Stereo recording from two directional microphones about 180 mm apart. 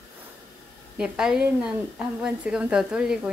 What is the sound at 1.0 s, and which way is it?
Speech, 5° right (ahead or behind).